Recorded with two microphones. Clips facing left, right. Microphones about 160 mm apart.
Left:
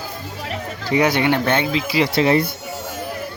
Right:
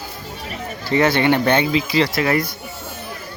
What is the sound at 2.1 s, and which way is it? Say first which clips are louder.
Speech: left 3 dB; 25° left (ahead or behind).